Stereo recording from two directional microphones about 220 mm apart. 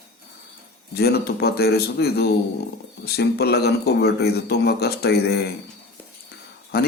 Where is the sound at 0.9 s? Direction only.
45° left (ahead or behind).